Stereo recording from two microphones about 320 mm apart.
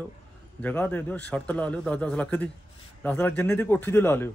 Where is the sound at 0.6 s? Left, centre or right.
Centre.